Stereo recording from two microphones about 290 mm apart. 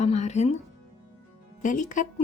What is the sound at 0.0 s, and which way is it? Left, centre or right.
Speech, left.